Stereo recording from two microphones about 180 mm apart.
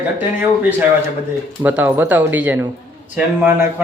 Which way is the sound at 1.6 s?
10° right (ahead or behind).